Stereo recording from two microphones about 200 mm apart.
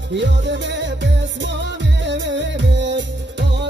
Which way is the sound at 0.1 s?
65° right (ahead or behind).